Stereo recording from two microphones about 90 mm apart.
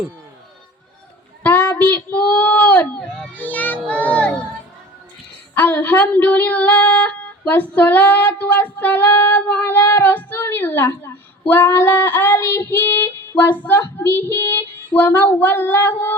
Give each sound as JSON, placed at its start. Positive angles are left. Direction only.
{"t": 1.5, "sound": "child singing", "side_deg": 20}
{"t": 3.3, "sound": "a child's voice", "side_deg": 20}
{"t": 5.5, "sound": "speech", "side_deg": 20}
{"t": 12.7, "sound": "child singing", "side_deg": 20}